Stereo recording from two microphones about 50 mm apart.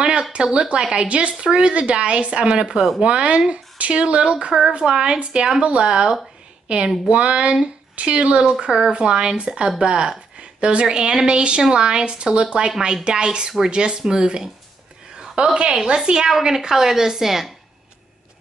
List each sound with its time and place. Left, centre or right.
0.0 s a woman's voice: centre